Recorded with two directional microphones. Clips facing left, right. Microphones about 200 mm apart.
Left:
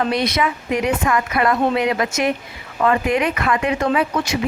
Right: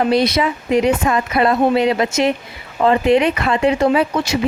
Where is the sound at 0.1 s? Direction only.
30° right (ahead or behind).